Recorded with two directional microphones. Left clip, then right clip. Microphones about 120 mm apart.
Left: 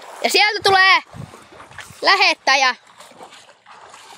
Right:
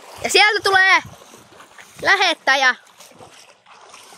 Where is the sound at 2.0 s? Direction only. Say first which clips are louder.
Left 1 dB; 15° left (ahead or behind).